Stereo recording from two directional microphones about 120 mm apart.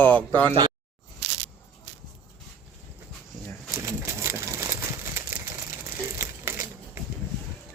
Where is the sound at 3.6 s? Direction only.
25° right (ahead or behind).